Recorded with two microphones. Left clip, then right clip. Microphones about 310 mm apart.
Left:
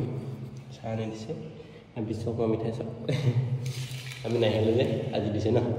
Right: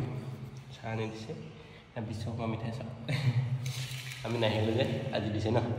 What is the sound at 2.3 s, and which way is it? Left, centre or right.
Speech, right.